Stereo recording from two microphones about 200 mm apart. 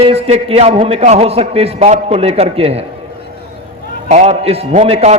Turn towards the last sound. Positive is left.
turn(degrees=-30)  # may be behind; listen again after turning